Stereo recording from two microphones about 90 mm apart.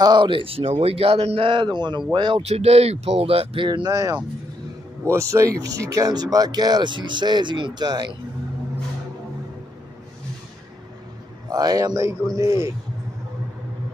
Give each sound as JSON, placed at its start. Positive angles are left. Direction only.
{"t": 0.0, "sound": "speech", "side_deg": -60}
{"t": 3.3, "sound": "speech", "side_deg": -90}
{"t": 3.6, "sound": "speech", "side_deg": -50}
{"t": 5.0, "sound": "speech", "side_deg": -35}
{"t": 11.4, "sound": "a man's voice", "side_deg": -45}